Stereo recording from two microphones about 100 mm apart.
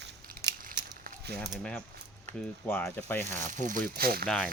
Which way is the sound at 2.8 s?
20° left (ahead or behind).